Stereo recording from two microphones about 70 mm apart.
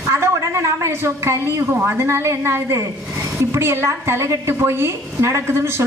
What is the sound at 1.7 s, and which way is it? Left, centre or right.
A woman's voice, right.